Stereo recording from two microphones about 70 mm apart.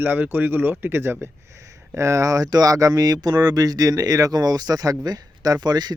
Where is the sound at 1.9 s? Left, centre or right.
Right.